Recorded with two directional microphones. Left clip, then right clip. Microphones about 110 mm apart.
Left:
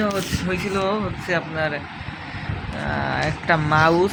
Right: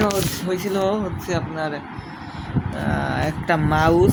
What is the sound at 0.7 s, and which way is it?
Speech, 20° right (ahead or behind).